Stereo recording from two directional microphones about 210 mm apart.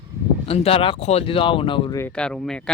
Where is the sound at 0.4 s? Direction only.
30° left (ahead or behind).